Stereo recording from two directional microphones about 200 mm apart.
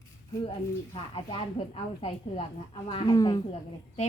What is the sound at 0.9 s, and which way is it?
Speech, 25° left (ahead or behind).